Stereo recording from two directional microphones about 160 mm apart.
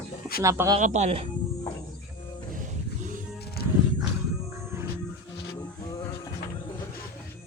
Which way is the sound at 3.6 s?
80° left.